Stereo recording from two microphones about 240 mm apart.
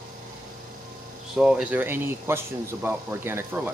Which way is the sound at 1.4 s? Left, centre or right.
Centre.